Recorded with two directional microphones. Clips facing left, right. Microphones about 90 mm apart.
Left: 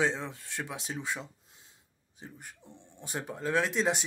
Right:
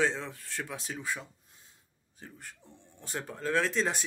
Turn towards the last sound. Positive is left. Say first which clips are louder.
# left 1 dB
turn(degrees=15)  # may be behind; listen again after turning